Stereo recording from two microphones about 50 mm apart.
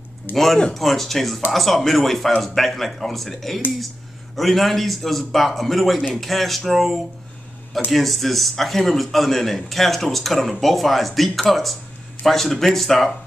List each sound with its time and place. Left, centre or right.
0.3 s speech: left
0.7 s a man's voice: centre